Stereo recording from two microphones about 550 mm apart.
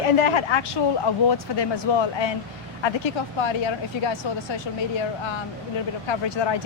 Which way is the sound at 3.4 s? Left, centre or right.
Left.